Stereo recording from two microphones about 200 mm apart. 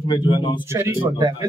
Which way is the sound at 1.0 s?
15° right (ahead or behind).